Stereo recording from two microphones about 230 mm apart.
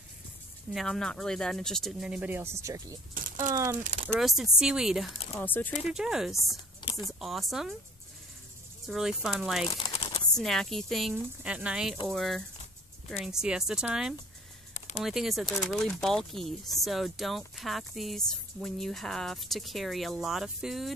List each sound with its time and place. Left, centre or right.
0.7 s speech: centre
3.2 s a sound: right
3.4 s speech: centre
3.8 s speech: right
4.2 s speech: centre
5.9 s speech: centre
6.8 s a sound: centre
7.1 s speech: centre
8.8 s speech: centre
9.7 s a sound: left
10.3 s speech: centre